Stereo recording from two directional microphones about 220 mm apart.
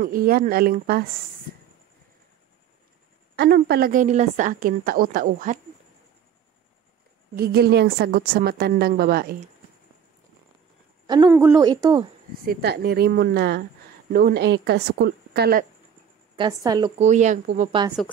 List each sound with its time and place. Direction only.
0.0 s a woman's voice: 40° right (ahead or behind)
3.3 s a woman's voice: 50° right (ahead or behind)
7.3 s a woman's voice: 45° right (ahead or behind)
11.2 s a woman's voice: 10° right (ahead or behind)
12.4 s a woman's voice: 45° right (ahead or behind)
16.3 s a woman's voice: 20° right (ahead or behind)
17.0 s a woman's voice: 30° right (ahead or behind)